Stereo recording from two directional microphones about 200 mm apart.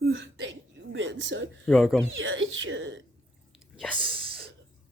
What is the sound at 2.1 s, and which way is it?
Speech, 70° right (ahead or behind).